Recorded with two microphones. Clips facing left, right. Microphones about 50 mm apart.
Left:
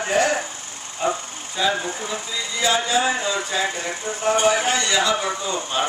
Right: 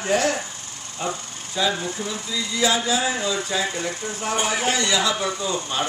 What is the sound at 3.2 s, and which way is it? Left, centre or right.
A man's voice, centre.